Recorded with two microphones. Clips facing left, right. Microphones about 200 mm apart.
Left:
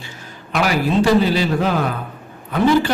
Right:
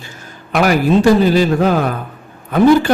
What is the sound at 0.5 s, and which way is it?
A man's voice, 50° right (ahead or behind).